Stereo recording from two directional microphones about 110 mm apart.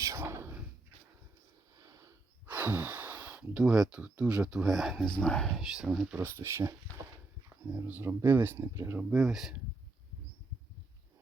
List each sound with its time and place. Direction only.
0.0 s a sound: 25° right (ahead or behind)
1.8 s snort: 30° right (ahead or behind)
2.5 s speech: 15° right (ahead or behind); by 5.5 s 10° left (ahead or behind)
5.5 s speech: 5° right (ahead or behind)
6.1 s speech: 25° right (ahead or behind)
8.5 s speech: 30° right (ahead or behind)
9.0 s speech: 5° right (ahead or behind)